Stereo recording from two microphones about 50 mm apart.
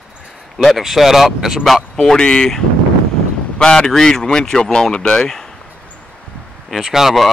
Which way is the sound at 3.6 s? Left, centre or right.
Centre.